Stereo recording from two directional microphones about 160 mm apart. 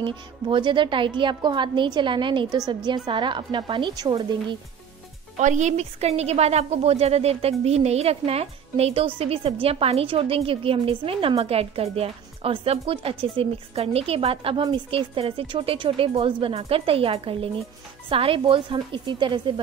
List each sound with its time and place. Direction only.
0.0 s a woman's voice: 30° right (ahead or behind)
5.4 s a woman's voice: 50° right (ahead or behind); by 19.6 s 30° right (ahead or behind)